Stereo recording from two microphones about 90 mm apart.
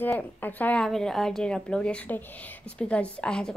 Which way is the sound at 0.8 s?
5° left (ahead or behind).